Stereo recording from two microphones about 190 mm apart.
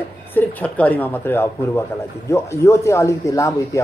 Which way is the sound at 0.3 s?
10° left (ahead or behind).